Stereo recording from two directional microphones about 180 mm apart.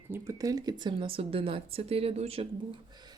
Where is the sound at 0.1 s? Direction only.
20° right (ahead or behind); by 2.5 s 35° right (ahead or behind).